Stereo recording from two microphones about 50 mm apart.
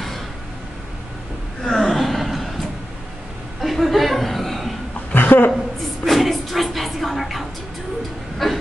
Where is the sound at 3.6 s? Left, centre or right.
Centre.